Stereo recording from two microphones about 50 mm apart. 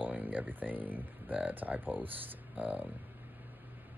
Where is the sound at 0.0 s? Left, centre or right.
Right.